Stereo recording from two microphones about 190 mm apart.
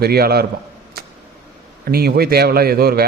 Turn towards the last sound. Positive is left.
turn(degrees=-55)  # may be behind; listen again after turning